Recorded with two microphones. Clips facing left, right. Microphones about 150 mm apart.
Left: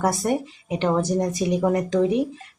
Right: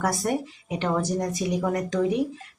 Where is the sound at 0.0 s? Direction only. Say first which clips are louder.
Left 3 dB; 25° left (ahead or behind).